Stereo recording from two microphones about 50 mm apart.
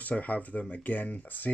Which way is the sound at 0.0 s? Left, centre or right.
Left.